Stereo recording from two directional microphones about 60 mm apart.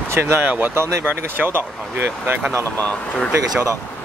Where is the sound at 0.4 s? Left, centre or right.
Right.